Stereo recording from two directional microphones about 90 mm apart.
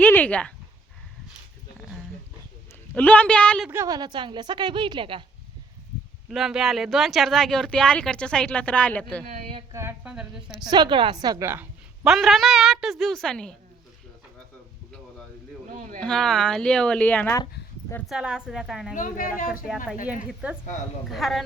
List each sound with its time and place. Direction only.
0.0 s a sound: 20° left (ahead or behind)
2.9 s speech: 20° left (ahead or behind)
3.8 s a woman's voice: 45° right (ahead or behind)
4.1 s a woman's voice: 60° right (ahead or behind)
6.3 s speech: 5° right (ahead or behind); by 9.2 s 15° left (ahead or behind)
10.0 s speech: 10° right (ahead or behind)
10.7 s a woman's voice: 55° right (ahead or behind)
11.3 s a woman's voice: 25° right (ahead or behind)
12.0 s a woman's voice: centre (ahead or behind)
16.0 s speech: 5° left (ahead or behind)
18.0 s a woman's voice: 5° right (ahead or behind)
20.1 s speech: 15° right (ahead or behind)
21.1 s a woman's voice: centre (ahead or behind)